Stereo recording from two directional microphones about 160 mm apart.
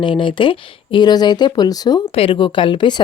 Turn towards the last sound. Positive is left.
turn(degrees=30)  # may be behind; listen again after turning